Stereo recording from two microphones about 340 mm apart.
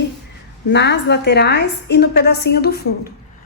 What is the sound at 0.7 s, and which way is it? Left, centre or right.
A woman's voice, left.